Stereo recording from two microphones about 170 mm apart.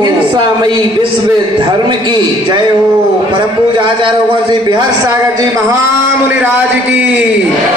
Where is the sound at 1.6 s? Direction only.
25° right (ahead or behind); by 7.1 s 10° right (ahead or behind).